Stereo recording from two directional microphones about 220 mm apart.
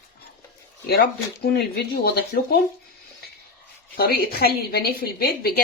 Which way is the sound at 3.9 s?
45° left (ahead or behind).